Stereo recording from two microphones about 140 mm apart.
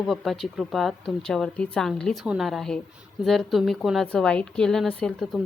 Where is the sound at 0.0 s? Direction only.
Centre (ahead or behind).